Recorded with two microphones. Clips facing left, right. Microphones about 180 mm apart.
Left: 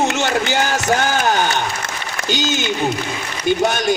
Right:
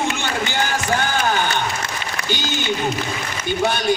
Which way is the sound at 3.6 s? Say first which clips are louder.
Right 2 dB; 45° left (ahead or behind).